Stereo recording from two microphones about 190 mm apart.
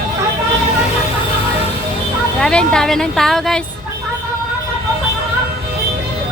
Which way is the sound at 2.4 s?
5° left (ahead or behind).